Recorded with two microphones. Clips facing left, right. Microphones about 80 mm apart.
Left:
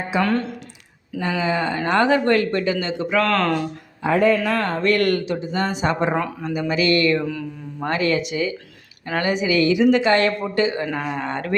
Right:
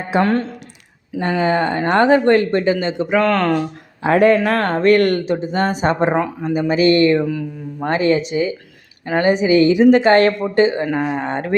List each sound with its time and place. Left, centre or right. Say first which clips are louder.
0.2 s speech: right 4 dB; right
1.2 s speech: right 5 dB; right
3.2 s speech: right 3 dB; centre
4.0 s speech: right 5 dB; right
7.2 s mantra: right 5 dB; centre
7.9 s speech: right 5 dB; right